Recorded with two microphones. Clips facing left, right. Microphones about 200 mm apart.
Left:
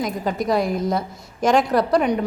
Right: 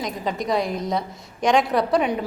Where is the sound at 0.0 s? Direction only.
Centre (ahead or behind).